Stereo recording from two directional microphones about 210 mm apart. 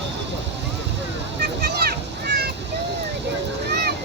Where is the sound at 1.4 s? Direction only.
50° right (ahead or behind).